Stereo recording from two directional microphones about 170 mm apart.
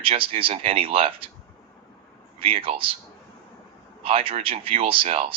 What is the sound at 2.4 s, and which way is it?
Speech, 35° right (ahead or behind).